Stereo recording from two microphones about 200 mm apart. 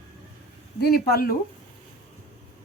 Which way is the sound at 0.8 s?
50° left (ahead or behind).